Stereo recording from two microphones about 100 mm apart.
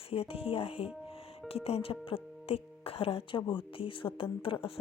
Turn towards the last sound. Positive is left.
turn(degrees=60)  # may be behind; listen again after turning